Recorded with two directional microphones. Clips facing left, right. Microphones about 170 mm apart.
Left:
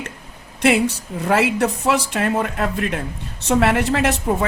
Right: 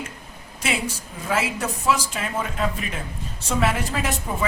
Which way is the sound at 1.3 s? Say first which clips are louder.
Left 7 dB; 65° left (ahead or behind).